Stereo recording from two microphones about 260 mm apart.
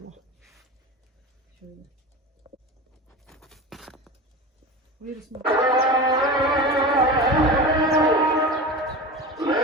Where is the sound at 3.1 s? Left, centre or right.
Centre.